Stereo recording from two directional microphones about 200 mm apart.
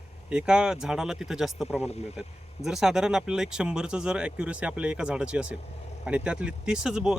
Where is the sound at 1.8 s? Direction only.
30° left (ahead or behind).